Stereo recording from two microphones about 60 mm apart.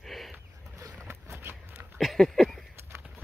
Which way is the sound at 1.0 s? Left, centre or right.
Right.